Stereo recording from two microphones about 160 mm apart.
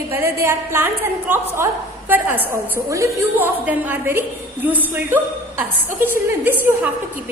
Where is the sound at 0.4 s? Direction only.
15° right (ahead or behind).